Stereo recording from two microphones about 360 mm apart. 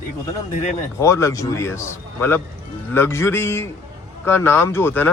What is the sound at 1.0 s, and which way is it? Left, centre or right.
A man's voice, centre.